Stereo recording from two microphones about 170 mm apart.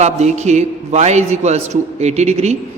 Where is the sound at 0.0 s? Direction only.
40° right (ahead or behind).